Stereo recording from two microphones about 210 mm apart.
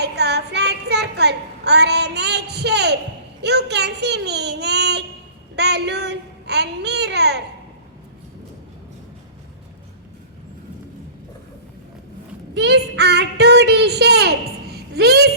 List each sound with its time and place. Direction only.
0.0 s a sound: 50° right (ahead or behind)
3.4 s a child's voice: 55° right (ahead or behind)
12.5 s child singing: 55° right (ahead or behind)